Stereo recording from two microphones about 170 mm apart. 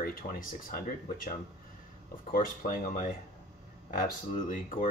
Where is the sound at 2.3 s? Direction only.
55° left (ahead or behind).